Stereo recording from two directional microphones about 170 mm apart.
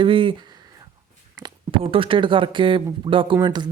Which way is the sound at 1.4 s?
30° right (ahead or behind).